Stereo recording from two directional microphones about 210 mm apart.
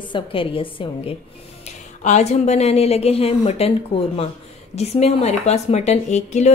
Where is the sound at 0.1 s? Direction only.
25° left (ahead or behind).